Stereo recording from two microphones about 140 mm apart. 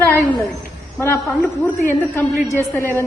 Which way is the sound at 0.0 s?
10° left (ahead or behind).